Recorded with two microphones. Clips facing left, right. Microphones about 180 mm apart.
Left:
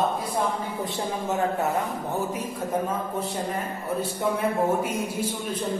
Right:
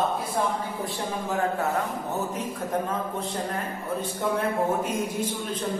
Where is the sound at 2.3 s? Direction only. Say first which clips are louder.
Left 1 dB; 10° left (ahead or behind).